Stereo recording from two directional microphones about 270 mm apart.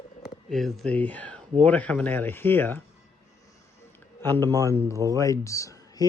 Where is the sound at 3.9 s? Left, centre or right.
Centre.